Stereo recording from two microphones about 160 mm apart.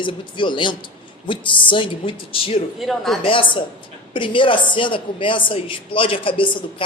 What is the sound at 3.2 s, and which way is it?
Speech, 35° left (ahead or behind).